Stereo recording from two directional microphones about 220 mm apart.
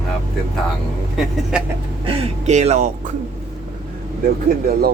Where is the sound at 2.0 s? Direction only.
30° right (ahead or behind).